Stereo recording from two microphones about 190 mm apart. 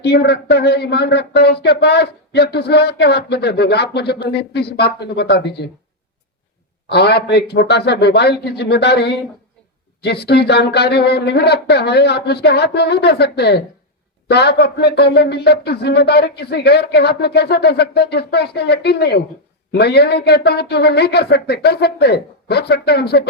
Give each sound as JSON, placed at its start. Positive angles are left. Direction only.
{"t": 0.0, "sound": "speech", "side_deg": 60}
{"t": 6.8, "sound": "speech", "side_deg": 60}